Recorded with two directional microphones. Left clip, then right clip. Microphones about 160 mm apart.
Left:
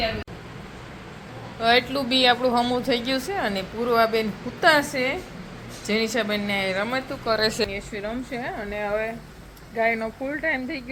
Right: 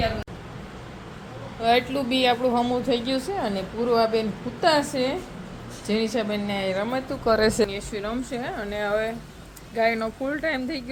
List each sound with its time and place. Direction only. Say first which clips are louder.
1.6 s a woman's voice: left 1 dB; 10° right (ahead or behind)
7.3 s a woman's voice: right 3 dB; 45° right (ahead or behind)
7.7 s a woman's voice: right 1 dB; 15° right (ahead or behind)